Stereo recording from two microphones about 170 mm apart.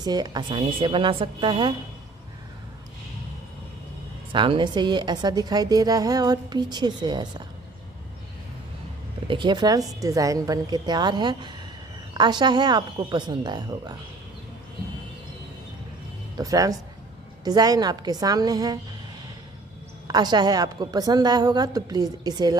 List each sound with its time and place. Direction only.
0.0 s a woman's voice: 25° right (ahead or behind)
4.3 s a woman's voice: 30° right (ahead or behind)
9.3 s a woman's voice: 25° right (ahead or behind)
16.3 s a woman's voice: 20° right (ahead or behind)
20.1 s a woman's voice: 25° right (ahead or behind)